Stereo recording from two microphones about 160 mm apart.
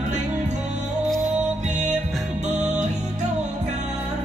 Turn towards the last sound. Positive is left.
turn(degrees=-45)  # may be behind; listen again after turning